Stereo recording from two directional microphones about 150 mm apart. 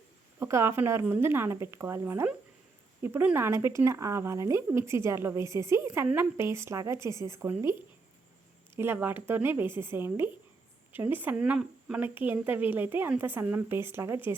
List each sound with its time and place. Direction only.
0.3 s speech: 15° right (ahead or behind)
8.7 s speech: 15° right (ahead or behind)